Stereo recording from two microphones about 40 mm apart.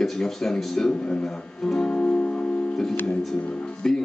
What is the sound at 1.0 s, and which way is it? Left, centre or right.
Speech, left.